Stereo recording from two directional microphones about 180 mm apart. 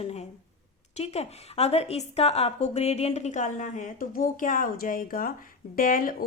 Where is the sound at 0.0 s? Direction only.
35° left (ahead or behind).